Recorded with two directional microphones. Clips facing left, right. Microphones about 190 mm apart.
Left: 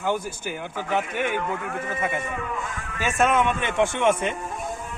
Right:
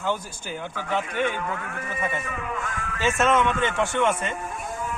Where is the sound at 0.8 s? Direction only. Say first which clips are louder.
Even; 15° left (ahead or behind).